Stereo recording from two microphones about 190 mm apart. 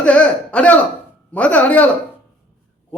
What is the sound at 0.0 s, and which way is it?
A man's voice, 5° left (ahead or behind).